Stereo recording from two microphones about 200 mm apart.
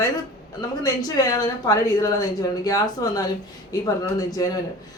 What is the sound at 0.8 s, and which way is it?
A woman's voice, 20° left (ahead or behind).